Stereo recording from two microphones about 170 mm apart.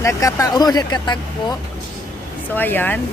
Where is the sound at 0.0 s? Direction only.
20° left (ahead or behind).